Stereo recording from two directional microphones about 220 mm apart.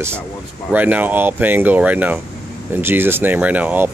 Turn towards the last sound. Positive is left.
turn(degrees=-5)  # may be behind; listen again after turning